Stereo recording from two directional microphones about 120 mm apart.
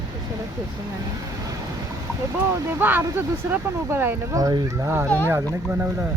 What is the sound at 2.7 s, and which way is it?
Speech, 15° right (ahead or behind).